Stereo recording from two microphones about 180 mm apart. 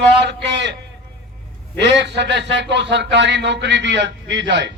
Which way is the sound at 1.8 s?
75° right (ahead or behind).